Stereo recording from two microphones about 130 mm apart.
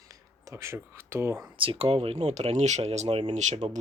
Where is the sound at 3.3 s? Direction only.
65° right (ahead or behind).